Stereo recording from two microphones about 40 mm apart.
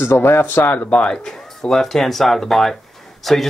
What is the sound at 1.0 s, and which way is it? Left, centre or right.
Speech, centre.